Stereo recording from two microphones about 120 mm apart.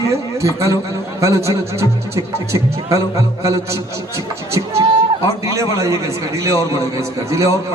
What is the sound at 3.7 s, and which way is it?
A man's voice, 25° right (ahead or behind).